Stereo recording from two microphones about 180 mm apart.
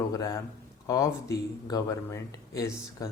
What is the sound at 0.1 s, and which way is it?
Speech, 20° left (ahead or behind).